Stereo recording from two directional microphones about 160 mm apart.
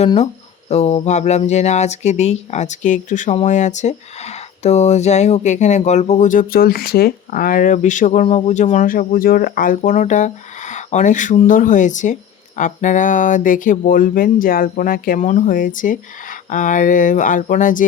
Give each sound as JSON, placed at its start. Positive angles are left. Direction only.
{"t": 0.7, "sound": "speech", "side_deg": 40}